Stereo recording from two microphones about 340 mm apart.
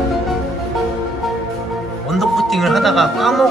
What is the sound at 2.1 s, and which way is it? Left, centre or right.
Speech, centre.